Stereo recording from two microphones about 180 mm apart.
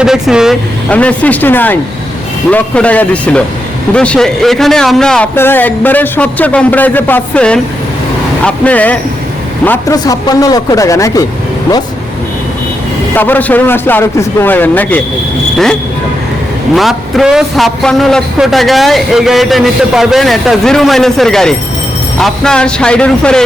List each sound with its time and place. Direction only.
0.0 s a man's voice: 5° right (ahead or behind); by 11.2 s 20° left (ahead or behind)
13.1 s a man's voice: 10° left (ahead or behind)
16.7 s a man's voice: centre (ahead or behind)